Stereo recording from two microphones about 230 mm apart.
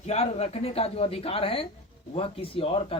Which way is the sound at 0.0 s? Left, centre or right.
Left.